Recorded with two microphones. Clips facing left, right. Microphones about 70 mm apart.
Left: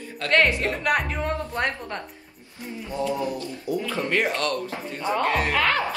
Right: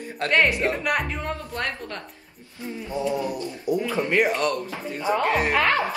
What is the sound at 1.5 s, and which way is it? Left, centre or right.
Speech, left.